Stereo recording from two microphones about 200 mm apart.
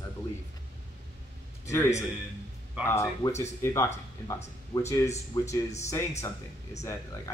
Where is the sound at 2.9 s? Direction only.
15° left (ahead or behind).